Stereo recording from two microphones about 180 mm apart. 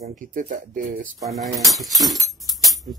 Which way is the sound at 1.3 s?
Centre (ahead or behind).